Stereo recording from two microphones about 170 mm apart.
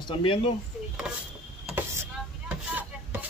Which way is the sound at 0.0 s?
30° left (ahead or behind).